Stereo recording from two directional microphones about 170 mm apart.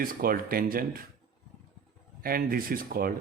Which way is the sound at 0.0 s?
60° right (ahead or behind).